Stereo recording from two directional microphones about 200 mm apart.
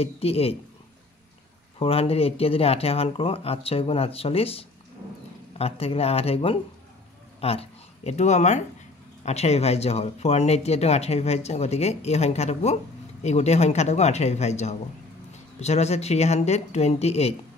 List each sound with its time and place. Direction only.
0.0 s speech: 30° left (ahead or behind)
1.8 s speech: 30° left (ahead or behind)